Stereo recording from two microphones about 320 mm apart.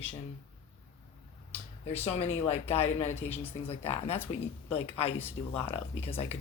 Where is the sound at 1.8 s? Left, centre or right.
Centre.